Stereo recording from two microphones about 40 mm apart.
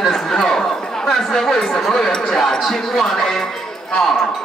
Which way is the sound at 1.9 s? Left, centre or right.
Centre.